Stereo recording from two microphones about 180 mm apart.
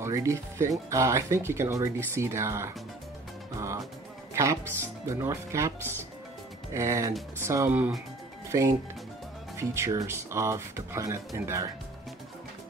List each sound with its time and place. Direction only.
0.0 s speech: 15° right (ahead or behind)
3.5 s music: 15° right (ahead or behind)
4.3 s speech: 15° right (ahead or behind)
6.7 s speech: 15° right (ahead or behind)